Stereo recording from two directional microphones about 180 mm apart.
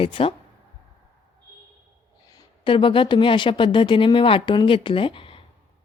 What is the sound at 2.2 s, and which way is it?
A woman's voice, 20° left (ahead or behind).